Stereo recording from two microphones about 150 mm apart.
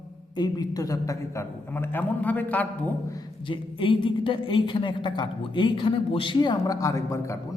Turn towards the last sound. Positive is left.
turn(degrees=20)  # may be behind; listen again after turning